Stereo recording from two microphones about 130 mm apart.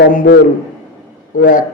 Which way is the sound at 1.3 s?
90° left.